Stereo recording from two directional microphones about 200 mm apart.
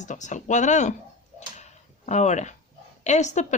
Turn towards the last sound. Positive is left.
turn(degrees=35)  # may be behind; listen again after turning